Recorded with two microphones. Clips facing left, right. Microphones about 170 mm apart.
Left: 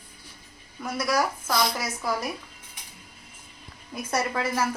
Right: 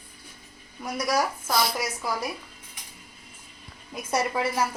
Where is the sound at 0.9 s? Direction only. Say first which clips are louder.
Even; 15° right (ahead or behind).